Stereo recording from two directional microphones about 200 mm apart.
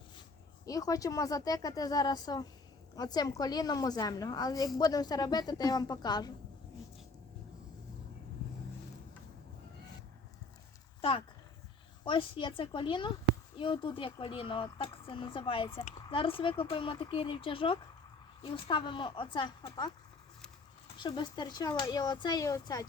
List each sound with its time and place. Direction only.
0.6 s speech: 15° left (ahead or behind)
12.0 s speech: 25° left (ahead or behind)
21.0 s speech: 20° left (ahead or behind)